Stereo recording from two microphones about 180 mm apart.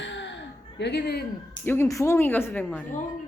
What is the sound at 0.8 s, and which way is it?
Speech, 70° left (ahead or behind).